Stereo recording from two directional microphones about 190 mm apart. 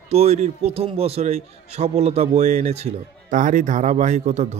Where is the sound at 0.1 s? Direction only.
35° right (ahead or behind).